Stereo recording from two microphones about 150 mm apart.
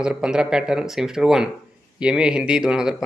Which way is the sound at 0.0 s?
5° right (ahead or behind).